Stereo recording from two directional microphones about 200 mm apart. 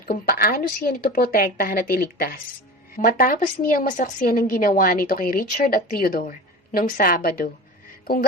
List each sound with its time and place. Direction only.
0.0 s a woman's voice: 45° left (ahead or behind)
8.0 s music: 45° left (ahead or behind)